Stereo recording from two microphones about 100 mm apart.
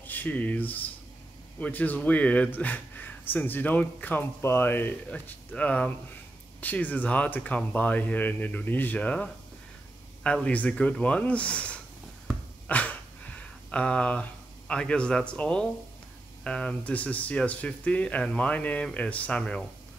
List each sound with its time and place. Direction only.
0.0 s speech: 15° left (ahead or behind)
12.6 s a sound: 15° left (ahead or behind)
14.7 s speech: 10° left (ahead or behind)